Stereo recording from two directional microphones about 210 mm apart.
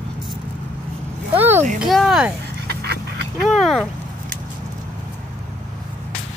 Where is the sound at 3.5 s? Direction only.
Centre (ahead or behind).